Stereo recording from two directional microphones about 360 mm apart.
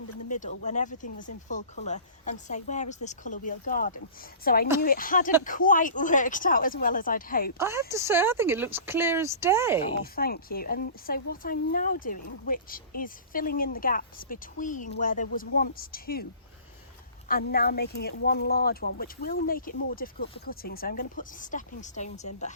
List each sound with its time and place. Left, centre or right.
0.3 s speech: left
7.6 s speech: centre
10.0 s speech: left
17.2 s speech: left